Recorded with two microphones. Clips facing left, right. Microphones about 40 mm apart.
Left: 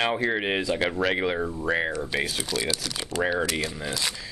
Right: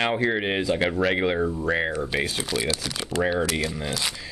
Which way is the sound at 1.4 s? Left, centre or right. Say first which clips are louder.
Right 2 dB; centre.